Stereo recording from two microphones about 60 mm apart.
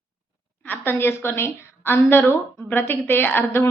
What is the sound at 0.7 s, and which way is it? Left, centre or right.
A woman's voice, left.